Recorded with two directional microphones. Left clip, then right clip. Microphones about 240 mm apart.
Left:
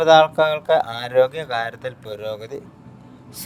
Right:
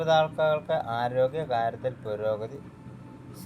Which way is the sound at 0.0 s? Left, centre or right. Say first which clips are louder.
Left 10 dB; left.